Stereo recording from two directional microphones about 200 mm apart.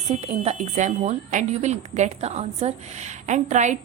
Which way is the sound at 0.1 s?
35° right (ahead or behind).